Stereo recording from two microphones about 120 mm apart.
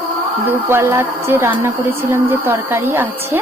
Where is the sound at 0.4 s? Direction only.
20° right (ahead or behind).